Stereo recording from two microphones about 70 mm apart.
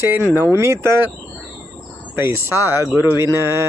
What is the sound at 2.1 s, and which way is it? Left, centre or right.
Speech, right.